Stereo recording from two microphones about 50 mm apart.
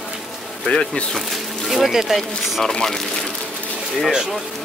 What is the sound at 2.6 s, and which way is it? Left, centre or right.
Speech, centre.